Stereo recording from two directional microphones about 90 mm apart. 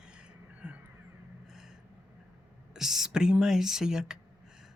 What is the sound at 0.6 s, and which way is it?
Mouse, 10° right (ahead or behind).